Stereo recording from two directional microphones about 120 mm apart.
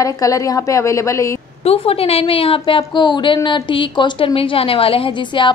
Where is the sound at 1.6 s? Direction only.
55° left (ahead or behind).